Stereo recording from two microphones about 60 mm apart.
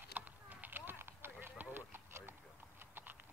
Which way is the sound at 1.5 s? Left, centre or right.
Right.